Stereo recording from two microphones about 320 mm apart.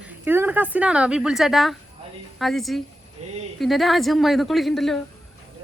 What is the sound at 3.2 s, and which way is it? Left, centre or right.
Speech, centre.